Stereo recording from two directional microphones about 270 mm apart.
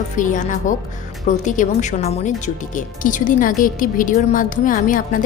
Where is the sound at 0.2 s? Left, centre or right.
Left.